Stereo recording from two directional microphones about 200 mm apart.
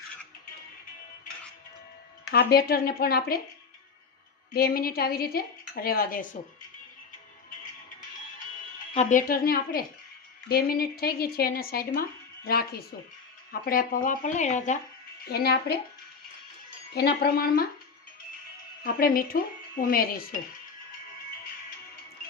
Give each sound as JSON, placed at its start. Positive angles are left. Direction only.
{"t": 2.3, "sound": "speech", "side_deg": 50}
{"t": 4.5, "sound": "speech", "side_deg": 50}
{"t": 8.9, "sound": "speech", "side_deg": 35}
{"t": 13.5, "sound": "speech", "side_deg": 45}
{"t": 15.3, "sound": "speech", "side_deg": 50}
{"t": 16.9, "sound": "speech", "side_deg": 55}
{"t": 18.8, "sound": "speech", "side_deg": 45}